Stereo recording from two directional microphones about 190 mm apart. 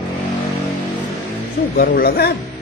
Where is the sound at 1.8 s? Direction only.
55° left (ahead or behind).